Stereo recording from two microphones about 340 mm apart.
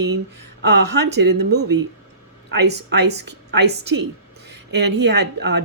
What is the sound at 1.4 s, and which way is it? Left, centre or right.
Speech, right.